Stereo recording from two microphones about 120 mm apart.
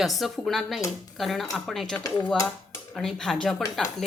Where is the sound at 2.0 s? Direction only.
30° left (ahead or behind).